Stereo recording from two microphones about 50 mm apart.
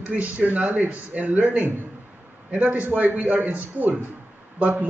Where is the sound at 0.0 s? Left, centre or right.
Right.